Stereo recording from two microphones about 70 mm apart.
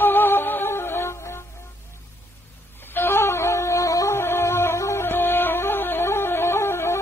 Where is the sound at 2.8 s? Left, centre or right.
Left.